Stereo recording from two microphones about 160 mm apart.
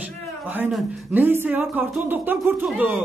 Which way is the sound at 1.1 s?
10° right (ahead or behind).